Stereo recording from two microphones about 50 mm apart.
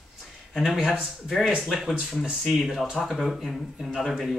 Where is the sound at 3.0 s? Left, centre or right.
Centre.